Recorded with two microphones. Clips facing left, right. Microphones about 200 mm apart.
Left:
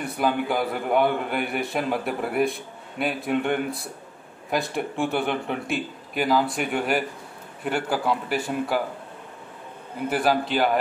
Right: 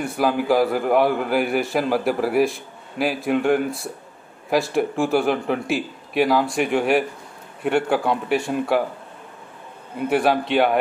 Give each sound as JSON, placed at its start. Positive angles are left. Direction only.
{"t": 0.0, "sound": "a man's voice", "side_deg": 0}
{"t": 7.7, "sound": "a man's voice", "side_deg": -60}
{"t": 8.3, "sound": "a man's voice", "side_deg": 0}
{"t": 10.2, "sound": "a man's voice", "side_deg": -65}